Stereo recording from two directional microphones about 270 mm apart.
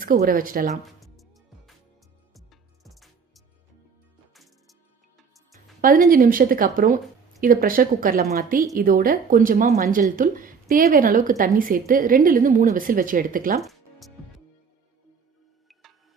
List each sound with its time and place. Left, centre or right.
0.0 s a woman's voice: right
0.9 s music: centre
5.8 s a woman's voice: right
13.6 s music: centre
15.7 s music: centre